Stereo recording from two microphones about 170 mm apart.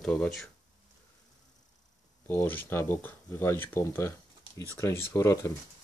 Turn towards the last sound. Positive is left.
turn(degrees=15)  # may be behind; listen again after turning